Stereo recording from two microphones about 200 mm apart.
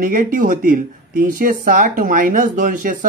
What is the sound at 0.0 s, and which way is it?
Speech, 45° right (ahead or behind).